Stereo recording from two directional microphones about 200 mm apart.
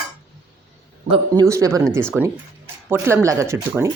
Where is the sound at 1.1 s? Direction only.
15° right (ahead or behind).